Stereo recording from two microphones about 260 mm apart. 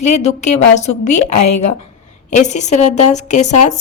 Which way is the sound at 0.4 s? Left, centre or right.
Left.